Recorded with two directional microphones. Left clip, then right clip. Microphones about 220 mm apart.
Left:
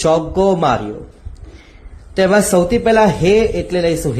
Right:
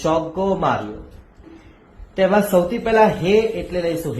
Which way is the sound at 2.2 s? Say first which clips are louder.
Left 3 dB; 50° left (ahead or behind).